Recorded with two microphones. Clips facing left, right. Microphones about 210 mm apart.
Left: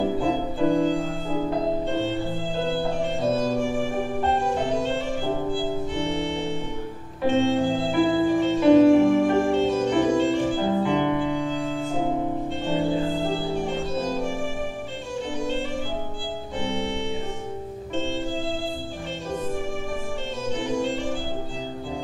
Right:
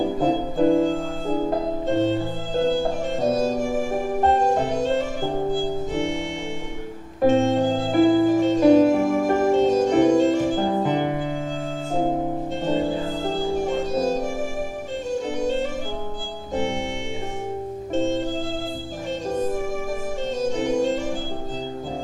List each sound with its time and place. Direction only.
0.2 s music: 40° right (ahead or behind)
16.5 s organ: 45° right (ahead or behind)
17.9 s music: 45° right (ahead or behind)
20.4 s music: 45° right (ahead or behind)